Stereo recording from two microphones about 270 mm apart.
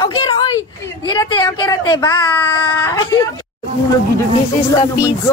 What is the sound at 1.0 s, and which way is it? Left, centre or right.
Speech, centre.